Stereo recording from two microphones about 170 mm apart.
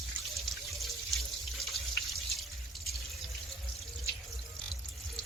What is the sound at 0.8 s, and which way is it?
Water, centre (ahead or behind).